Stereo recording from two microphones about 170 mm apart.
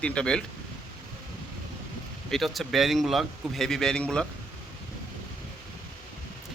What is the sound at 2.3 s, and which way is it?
Speech, centre (ahead or behind).